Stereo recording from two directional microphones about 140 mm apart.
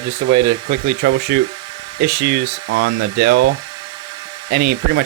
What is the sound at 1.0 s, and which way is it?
Speech, 90° right.